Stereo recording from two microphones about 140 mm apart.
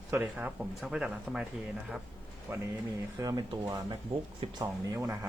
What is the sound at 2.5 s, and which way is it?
Speech, 15° right (ahead or behind).